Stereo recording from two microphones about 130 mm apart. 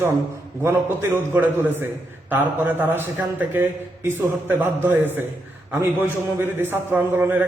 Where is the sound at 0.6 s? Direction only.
15° right (ahead or behind).